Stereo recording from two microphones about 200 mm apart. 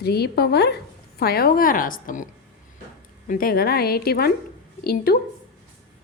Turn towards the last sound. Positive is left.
turn(degrees=50)  # may be behind; listen again after turning